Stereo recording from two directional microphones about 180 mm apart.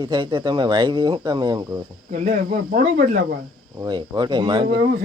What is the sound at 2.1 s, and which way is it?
Speech, 40° right (ahead or behind).